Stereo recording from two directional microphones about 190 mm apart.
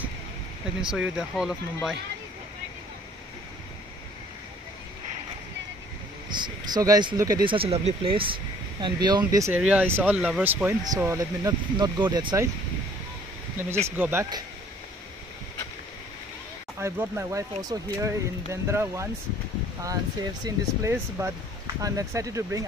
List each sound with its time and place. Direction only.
0.7 s speech: 5° right (ahead or behind)
6.3 s speech: 20° right (ahead or behind)
13.8 s speech: 10° right (ahead or behind)
16.8 s speech: 15° right (ahead or behind)
20.4 s speech: 15° right (ahead or behind)